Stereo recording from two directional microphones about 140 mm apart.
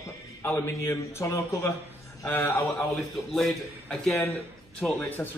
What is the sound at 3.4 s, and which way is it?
A man's voice, 5° left (ahead or behind).